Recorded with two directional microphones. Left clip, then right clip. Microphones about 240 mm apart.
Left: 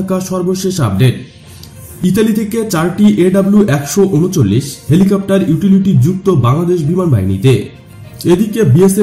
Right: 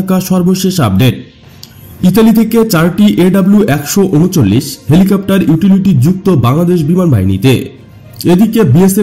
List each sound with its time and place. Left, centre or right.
0.1 s speech: right
2.1 s speech: right